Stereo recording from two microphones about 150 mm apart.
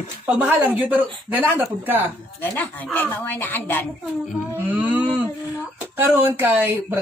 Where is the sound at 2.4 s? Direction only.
10° left (ahead or behind).